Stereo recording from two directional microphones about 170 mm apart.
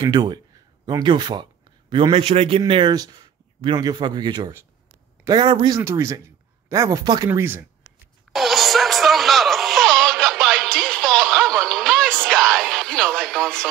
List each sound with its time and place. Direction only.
0.0 s a man's voice: 25° right (ahead or behind)
2.7 s speech: 25° right (ahead or behind)
5.8 s speech: 15° right (ahead or behind)
8.3 s music: centre (ahead or behind)